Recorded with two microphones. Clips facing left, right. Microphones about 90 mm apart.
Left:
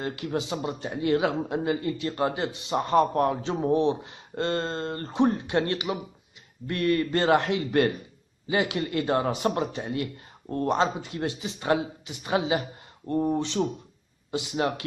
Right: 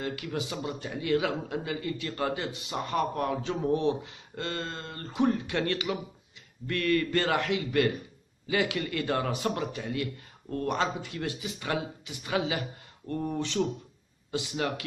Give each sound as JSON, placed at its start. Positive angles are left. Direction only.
{"t": 0.0, "sound": "a man's voice", "side_deg": 30}
{"t": 3.6, "sound": "speech", "side_deg": 25}
{"t": 4.4, "sound": "a man's voice", "side_deg": 35}